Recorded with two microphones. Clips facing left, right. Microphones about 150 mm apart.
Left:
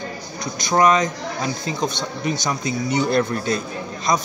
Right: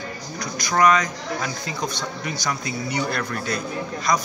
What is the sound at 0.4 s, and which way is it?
Speech, 25° left (ahead or behind).